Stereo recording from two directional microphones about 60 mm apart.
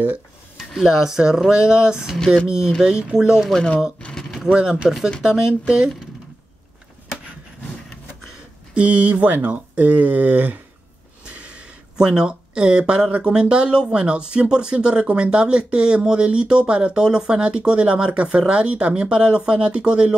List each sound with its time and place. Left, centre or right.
0.6 s speech: centre
2.1 s speech: centre
2.4 s speech: centre
4.0 s a sound: centre
4.5 s speech: centre
8.7 s speech: right